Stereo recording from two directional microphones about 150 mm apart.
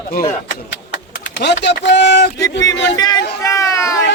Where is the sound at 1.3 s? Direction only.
90° left.